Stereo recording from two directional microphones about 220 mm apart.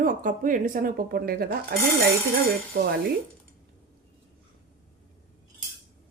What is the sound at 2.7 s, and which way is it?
Speech, 45° right (ahead or behind).